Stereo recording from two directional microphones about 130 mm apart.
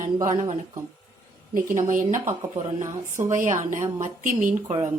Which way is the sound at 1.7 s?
80° right.